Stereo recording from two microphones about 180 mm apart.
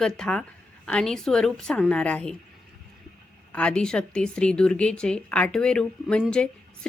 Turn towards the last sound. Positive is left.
turn(degrees=5)  # may be behind; listen again after turning